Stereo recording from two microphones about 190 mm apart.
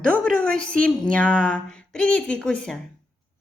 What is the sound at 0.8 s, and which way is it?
Speech, 5° left (ahead or behind).